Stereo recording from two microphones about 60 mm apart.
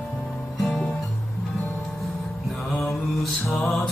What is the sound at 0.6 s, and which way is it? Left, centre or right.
Music, centre.